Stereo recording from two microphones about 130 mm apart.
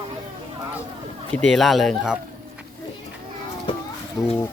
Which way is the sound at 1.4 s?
Centre (ahead or behind).